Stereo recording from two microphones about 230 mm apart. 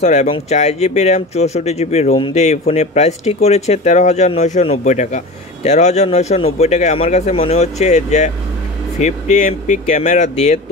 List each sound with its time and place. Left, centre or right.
0.0 s speech: left